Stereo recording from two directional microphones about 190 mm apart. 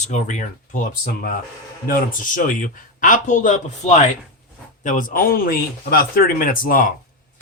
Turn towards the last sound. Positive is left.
turn(degrees=45)  # may be behind; listen again after turning